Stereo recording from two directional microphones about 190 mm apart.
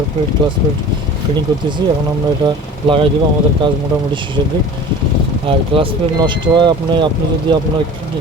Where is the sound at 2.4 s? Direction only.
25° right (ahead or behind).